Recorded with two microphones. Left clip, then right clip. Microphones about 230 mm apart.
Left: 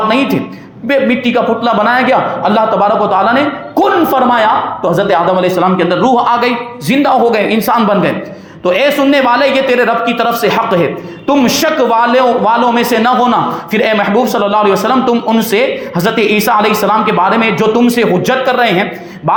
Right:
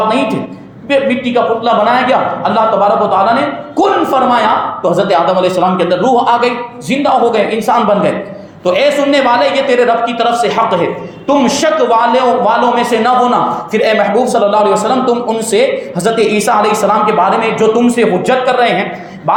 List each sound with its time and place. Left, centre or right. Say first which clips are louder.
0.9 s a man's voice: left 1 dB; left